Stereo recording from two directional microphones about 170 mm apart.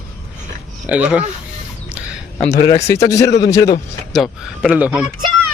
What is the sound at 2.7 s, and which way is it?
Speech, 20° left (ahead or behind).